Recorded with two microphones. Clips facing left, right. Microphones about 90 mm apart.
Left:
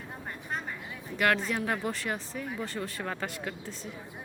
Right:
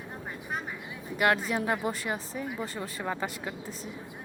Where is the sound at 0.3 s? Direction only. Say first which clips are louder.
Even; 5° right (ahead or behind).